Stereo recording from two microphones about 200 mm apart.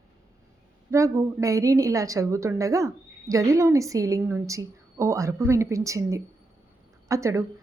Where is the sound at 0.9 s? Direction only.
15° right (ahead or behind).